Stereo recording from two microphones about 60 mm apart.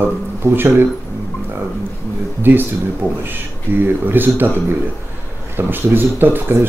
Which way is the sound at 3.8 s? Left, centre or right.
Right.